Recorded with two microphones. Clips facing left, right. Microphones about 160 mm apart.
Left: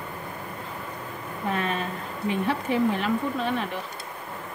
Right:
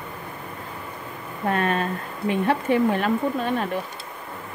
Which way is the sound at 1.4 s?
55° right (ahead or behind).